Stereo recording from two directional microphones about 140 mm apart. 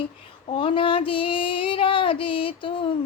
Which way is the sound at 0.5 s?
35° left (ahead or behind).